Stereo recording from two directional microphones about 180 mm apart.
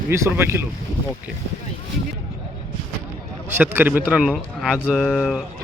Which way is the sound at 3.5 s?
10° right (ahead or behind).